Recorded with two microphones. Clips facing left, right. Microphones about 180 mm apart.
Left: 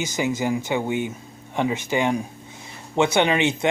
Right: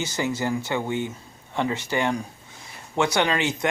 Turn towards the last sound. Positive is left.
turn(degrees=25)  # may be behind; listen again after turning